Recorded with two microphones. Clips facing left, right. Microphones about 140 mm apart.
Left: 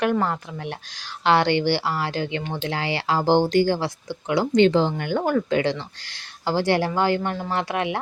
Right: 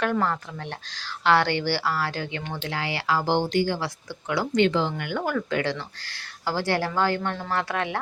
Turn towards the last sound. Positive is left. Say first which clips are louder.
# left 2 dB
turn(degrees=15)  # may be behind; listen again after turning